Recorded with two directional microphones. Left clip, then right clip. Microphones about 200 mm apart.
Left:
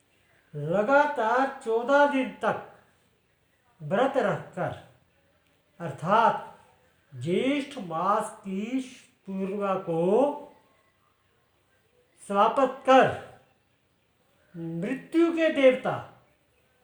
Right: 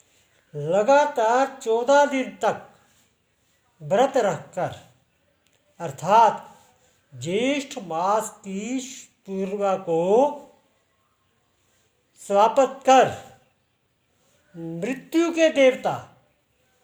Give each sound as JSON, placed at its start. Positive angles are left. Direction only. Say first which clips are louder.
{"t": 0.6, "sound": "speech", "louder": "right 4 dB", "side_deg": -40}
{"t": 3.8, "sound": "speech", "louder": "right 5 dB", "side_deg": -40}
{"t": 5.7, "sound": "speech", "louder": "right 6 dB", "side_deg": -40}
{"t": 12.1, "sound": "speech", "louder": "right 5 dB", "side_deg": -40}
{"t": 14.8, "sound": "speech", "louder": "right 2 dB", "side_deg": -40}